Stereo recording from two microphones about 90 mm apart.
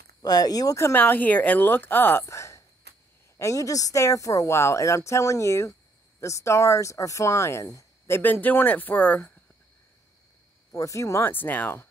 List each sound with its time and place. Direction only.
0.2 s speech: 45° left (ahead or behind)
0.9 s a woman's voice: 20° left (ahead or behind)
2.2 s a sound: 35° left (ahead or behind)
3.3 s speech: 35° left (ahead or behind)
8.2 s a woman's voice: 20° left (ahead or behind)
10.7 s a woman's voice: 35° left (ahead or behind)